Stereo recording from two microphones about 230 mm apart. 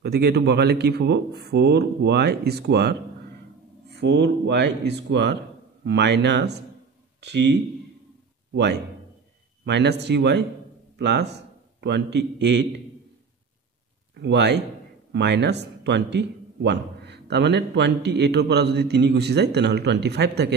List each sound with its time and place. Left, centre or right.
0.0 s a man's voice: right
9.7 s a man's voice: right
14.1 s a man's voice: right